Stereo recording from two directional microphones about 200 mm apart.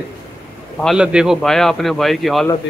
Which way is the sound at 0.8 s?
5° right (ahead or behind).